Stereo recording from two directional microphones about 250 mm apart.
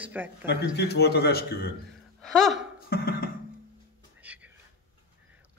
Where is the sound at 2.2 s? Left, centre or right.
Centre.